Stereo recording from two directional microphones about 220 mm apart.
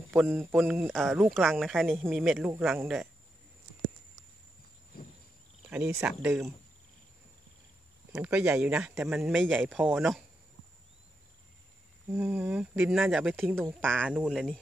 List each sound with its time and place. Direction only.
0.1 s speech: centre (ahead or behind)
5.7 s speech: 10° right (ahead or behind)
8.1 s speech: 5° right (ahead or behind)
12.1 s speech: 10° right (ahead or behind)
13.6 s speech: 5° left (ahead or behind)